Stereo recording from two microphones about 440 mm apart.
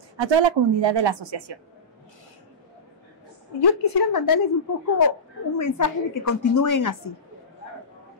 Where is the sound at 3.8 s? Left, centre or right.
Left.